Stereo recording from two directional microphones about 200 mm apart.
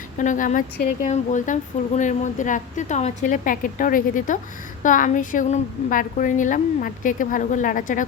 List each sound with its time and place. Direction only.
0.2 s a woman's voice: 40° left (ahead or behind)